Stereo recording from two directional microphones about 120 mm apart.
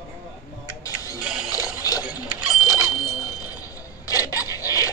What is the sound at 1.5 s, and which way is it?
Boat, 30° left (ahead or behind).